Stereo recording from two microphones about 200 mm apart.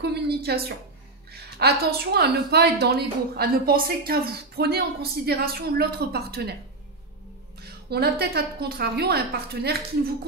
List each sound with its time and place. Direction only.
0.0 s a sound: 55° right (ahead or behind)
1.3 s a woman's voice: 50° right (ahead or behind)
7.6 s a woman's voice: 50° right (ahead or behind)